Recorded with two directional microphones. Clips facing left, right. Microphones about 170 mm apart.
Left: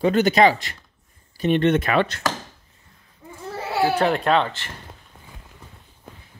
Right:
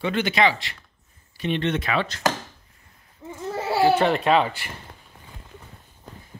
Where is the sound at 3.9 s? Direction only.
Centre (ahead or behind).